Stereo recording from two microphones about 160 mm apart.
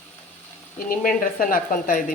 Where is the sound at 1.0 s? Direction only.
60° left (ahead or behind).